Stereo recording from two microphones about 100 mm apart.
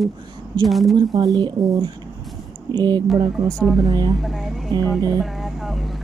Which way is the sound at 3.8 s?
45° right (ahead or behind).